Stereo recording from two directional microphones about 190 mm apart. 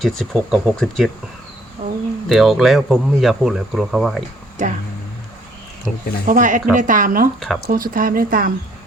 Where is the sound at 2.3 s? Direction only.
Centre (ahead or behind).